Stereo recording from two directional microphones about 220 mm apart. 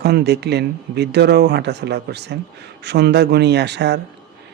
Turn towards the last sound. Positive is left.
turn(degrees=-50)  # may be behind; listen again after turning